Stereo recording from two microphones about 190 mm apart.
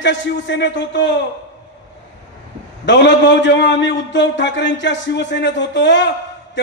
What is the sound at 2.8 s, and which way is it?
A man's voice, 70° left (ahead or behind).